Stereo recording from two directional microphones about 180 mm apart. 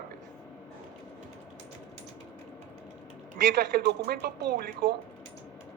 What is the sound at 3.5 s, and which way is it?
Speech, 60° right (ahead or behind).